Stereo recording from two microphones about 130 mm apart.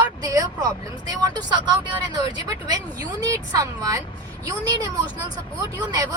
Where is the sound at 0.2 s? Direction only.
30° right (ahead or behind).